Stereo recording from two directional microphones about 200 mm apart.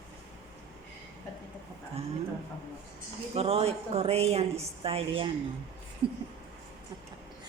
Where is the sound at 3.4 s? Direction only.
30° right (ahead or behind).